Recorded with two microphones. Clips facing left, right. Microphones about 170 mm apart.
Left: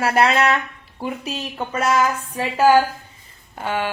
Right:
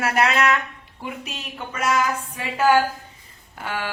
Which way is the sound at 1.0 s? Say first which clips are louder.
Left 6 dB; 35° left (ahead or behind).